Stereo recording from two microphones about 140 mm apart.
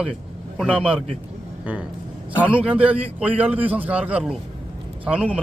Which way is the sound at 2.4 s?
10° right (ahead or behind).